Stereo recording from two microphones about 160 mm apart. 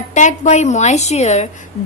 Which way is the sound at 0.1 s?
50° left (ahead or behind).